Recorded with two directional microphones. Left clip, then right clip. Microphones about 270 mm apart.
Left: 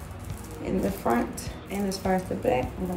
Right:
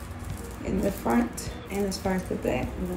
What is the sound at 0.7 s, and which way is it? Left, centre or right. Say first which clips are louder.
A woman's voice: left 1 dB; centre.